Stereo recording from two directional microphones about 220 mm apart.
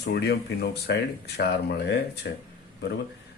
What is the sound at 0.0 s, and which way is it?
Speech, 50° left (ahead or behind).